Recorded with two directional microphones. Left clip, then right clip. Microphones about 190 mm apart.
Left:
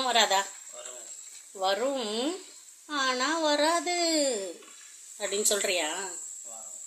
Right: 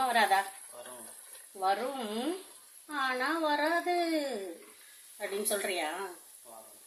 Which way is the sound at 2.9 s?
45° left (ahead or behind).